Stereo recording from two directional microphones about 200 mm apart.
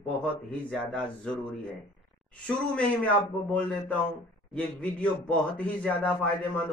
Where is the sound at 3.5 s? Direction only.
5° left (ahead or behind).